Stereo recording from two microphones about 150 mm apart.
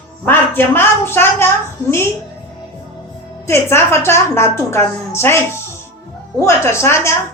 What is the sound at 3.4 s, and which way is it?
A woman's voice, 15° left (ahead or behind).